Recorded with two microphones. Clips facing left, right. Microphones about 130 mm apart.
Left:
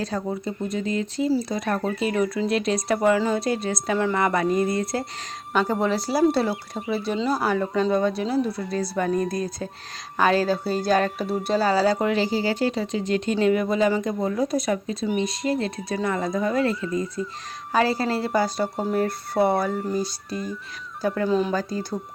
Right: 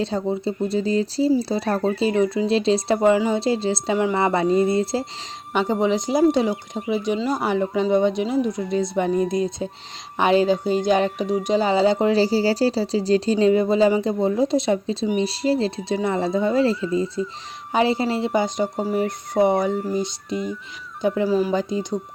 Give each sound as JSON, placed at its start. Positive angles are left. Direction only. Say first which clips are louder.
{"t": 0.0, "sound": "speech", "louder": "right 4 dB", "side_deg": -25}
{"t": 18.8, "sound": "speech", "louder": "even", "side_deg": -5}
{"t": 19.0, "sound": "speech", "louder": "right 4 dB", "side_deg": -15}
{"t": 21.2, "sound": "speech", "louder": "even", "side_deg": -5}
{"t": 21.5, "sound": "speech", "louder": "right 4 dB", "side_deg": -20}